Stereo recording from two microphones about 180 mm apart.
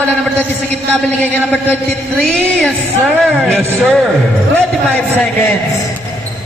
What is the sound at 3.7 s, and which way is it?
A man's voice, centre (ahead or behind).